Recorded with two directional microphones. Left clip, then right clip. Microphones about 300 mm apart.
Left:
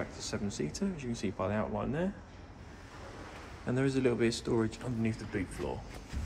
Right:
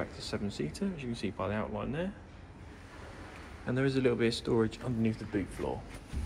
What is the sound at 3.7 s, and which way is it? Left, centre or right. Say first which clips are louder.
Speech: right 1 dB; centre.